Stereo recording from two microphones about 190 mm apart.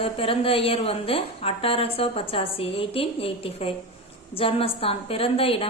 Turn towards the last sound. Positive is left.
turn(degrees=30)  # may be behind; listen again after turning